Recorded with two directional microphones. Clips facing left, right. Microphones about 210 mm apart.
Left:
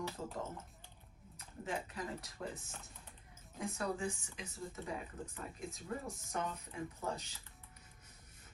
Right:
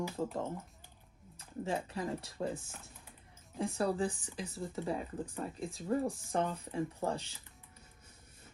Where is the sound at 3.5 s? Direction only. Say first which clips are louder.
Right 7 dB; 30° right (ahead or behind).